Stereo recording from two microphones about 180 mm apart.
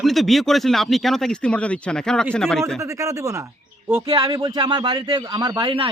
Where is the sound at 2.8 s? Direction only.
15° right (ahead or behind).